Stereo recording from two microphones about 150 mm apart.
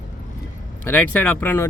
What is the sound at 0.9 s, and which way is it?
Speech, 10° left (ahead or behind).